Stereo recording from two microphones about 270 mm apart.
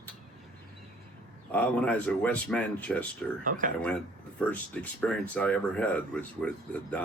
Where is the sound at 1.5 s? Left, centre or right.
Centre.